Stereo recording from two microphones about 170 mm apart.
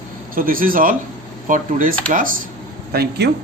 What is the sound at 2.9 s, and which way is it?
Speech, 70° right (ahead or behind).